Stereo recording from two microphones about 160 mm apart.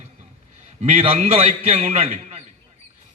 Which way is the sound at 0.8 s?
40° right (ahead or behind).